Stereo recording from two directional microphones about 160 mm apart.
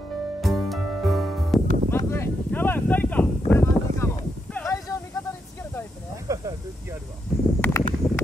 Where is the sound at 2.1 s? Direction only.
15° left (ahead or behind).